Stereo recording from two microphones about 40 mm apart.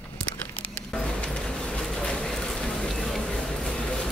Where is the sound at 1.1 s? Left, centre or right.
Left.